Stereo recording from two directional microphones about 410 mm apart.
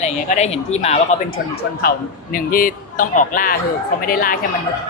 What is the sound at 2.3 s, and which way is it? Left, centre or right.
Speech, centre.